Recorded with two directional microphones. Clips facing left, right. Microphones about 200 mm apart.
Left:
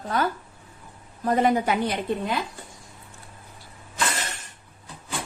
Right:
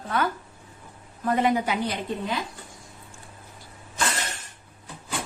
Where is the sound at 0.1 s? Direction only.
40° left (ahead or behind); by 2.0 s 55° left (ahead or behind).